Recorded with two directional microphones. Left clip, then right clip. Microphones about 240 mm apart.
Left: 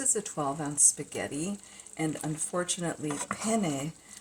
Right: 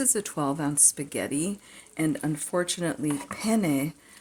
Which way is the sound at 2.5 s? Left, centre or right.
Right.